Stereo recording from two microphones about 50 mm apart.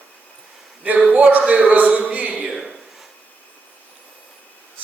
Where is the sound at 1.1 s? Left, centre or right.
Right.